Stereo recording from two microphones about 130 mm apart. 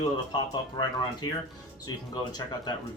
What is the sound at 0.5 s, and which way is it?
Speech, 35° left (ahead or behind).